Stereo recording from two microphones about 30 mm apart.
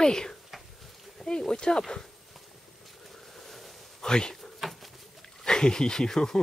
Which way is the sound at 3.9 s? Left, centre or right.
Left.